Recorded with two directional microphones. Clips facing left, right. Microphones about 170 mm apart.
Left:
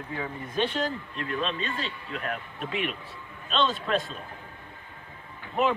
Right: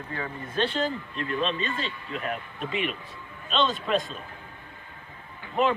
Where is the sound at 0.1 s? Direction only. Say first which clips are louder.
Even; 10° left (ahead or behind).